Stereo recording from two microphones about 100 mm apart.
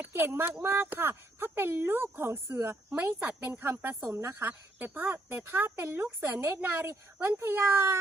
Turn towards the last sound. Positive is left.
turn(degrees=-25)  # may be behind; listen again after turning